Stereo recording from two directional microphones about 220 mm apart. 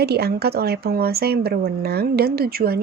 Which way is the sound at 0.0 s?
45° right (ahead or behind).